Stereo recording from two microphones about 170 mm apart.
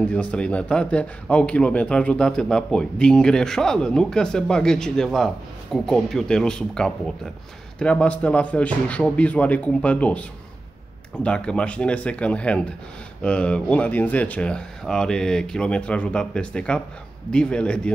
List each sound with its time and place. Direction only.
0.0 s a man's voice: 5° left (ahead or behind)
11.2 s a man's voice: 5° left (ahead or behind)